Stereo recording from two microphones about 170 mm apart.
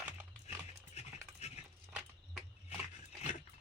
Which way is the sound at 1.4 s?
40° left (ahead or behind).